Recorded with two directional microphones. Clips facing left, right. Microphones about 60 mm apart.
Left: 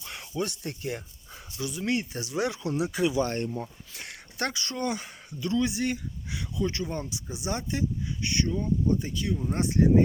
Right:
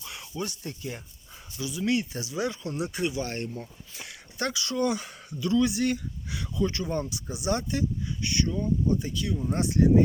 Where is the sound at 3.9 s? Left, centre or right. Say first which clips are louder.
Left 1 dB; left.